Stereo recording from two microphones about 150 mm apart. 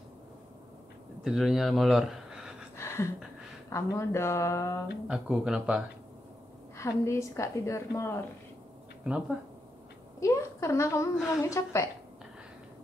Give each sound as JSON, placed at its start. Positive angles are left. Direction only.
{"t": 1.2, "sound": "speech", "side_deg": 0}
{"t": 2.8, "sound": "a sound", "side_deg": 20}
{"t": 3.7, "sound": "a woman's voice", "side_deg": 20}
{"t": 5.0, "sound": "speech", "side_deg": -5}
{"t": 6.8, "sound": "a woman's voice", "side_deg": 20}
{"t": 10.2, "sound": "a woman's voice", "side_deg": 20}